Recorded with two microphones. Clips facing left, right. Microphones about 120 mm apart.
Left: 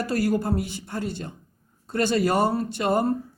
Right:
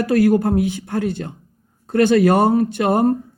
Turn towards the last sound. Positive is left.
turn(degrees=-55)  # may be behind; listen again after turning